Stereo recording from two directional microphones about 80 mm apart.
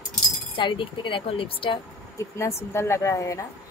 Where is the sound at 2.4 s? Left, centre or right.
Left.